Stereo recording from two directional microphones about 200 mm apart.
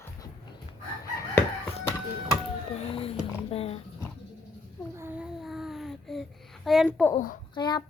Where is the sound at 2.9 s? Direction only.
30° left (ahead or behind).